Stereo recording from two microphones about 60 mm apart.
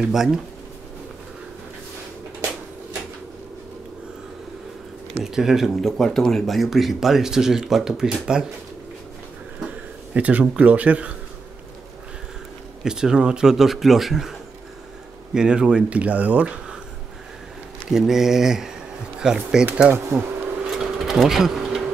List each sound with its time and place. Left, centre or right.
0.0 s speech: centre
5.2 s speech: centre
5.8 s speech: centre
9.7 s speech: right
12.8 s speech: centre
15.3 s speech: centre
17.8 s speech: centre
19.9 s speech: right
20.7 s sewing machine: centre